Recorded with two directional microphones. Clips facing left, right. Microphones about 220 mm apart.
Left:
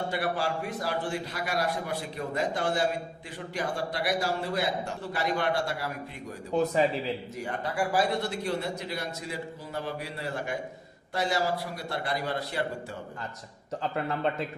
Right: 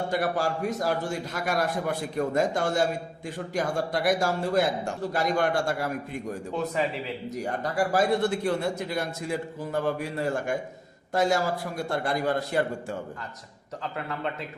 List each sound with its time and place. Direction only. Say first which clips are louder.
0.1 s a man's voice: right 3 dB; 45° right (ahead or behind)
6.5 s a man's voice: left 4 dB; 35° left (ahead or behind)
7.3 s a man's voice: right 7 dB; 40° right (ahead or behind)